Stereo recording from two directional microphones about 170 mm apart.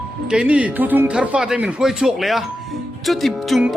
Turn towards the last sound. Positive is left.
turn(degrees=0)  # may be behind; listen again after turning